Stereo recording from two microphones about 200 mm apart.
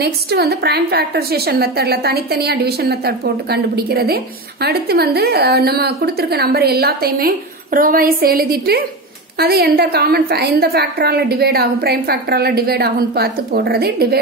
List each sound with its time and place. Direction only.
0.0 s a woman's voice: 55° right (ahead or behind)